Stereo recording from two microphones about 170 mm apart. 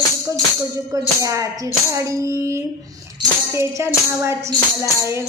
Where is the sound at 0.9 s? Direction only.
20° right (ahead or behind).